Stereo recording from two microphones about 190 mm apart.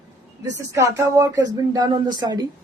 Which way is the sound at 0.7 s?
15° right (ahead or behind).